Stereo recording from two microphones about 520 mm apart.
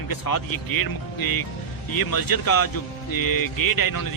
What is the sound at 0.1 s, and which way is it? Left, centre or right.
Speech, left.